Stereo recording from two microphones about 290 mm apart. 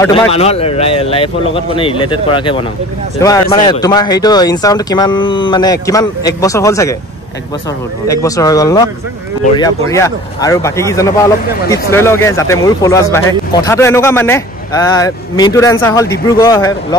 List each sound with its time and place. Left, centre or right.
0.3 s speech: left
8.1 s speech: centre